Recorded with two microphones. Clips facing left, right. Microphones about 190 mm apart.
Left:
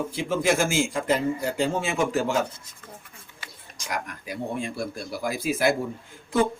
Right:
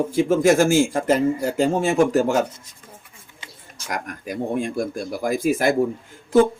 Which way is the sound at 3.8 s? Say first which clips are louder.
Right 3 dB; 50° right (ahead or behind).